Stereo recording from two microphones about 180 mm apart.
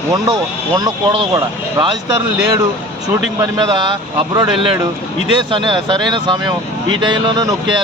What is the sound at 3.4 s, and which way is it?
Speech, 20° right (ahead or behind).